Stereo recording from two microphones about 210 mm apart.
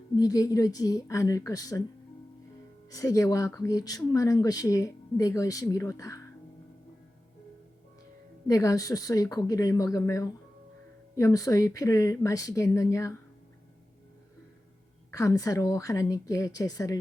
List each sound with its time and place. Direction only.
0.2 s speech: 15° left (ahead or behind)
2.9 s speech: 15° left (ahead or behind)
8.4 s speech: 15° left (ahead or behind)
15.1 s speech: 15° left (ahead or behind)